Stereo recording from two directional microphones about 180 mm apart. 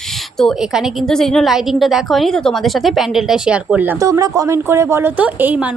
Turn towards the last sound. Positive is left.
turn(degrees=-10)  # may be behind; listen again after turning